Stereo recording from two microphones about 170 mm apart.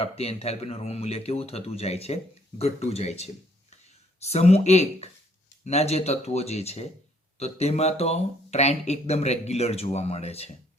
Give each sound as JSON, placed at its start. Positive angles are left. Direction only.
{"t": 0.0, "sound": "speech", "side_deg": 35}